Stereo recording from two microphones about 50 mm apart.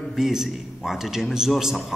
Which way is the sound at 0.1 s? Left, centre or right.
Centre.